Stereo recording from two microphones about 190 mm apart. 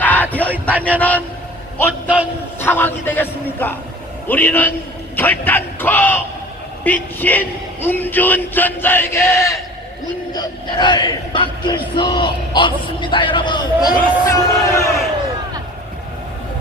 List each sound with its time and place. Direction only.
0.0 s a sound: 10° left (ahead or behind)
0.9 s speech: 10° left (ahead or behind)
1.9 s a man's voice: 5° right (ahead or behind)
2.6 s speech: 10° left (ahead or behind)